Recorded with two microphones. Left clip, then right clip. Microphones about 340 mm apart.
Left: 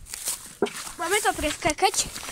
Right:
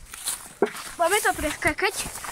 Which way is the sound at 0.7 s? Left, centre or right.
Centre.